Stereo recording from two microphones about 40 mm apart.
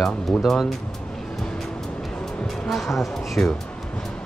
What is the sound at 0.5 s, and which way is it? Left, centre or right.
Speech, centre.